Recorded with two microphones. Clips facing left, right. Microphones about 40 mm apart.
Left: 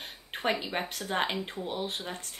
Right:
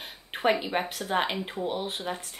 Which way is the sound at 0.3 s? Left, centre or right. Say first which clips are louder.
Right 5 dB; centre.